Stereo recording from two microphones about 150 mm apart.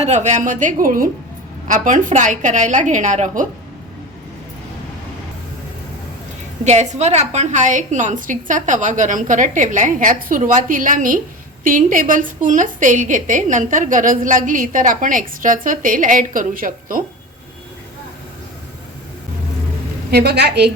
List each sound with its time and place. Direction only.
0.0 s a woman's voice: 50° right (ahead or behind)
6.7 s a woman's voice: 50° right (ahead or behind); by 17.0 s 65° right (ahead or behind)
20.1 s a woman's voice: 90° right